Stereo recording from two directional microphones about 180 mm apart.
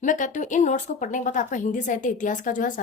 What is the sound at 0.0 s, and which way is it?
A woman's voice, 45° left (ahead or behind).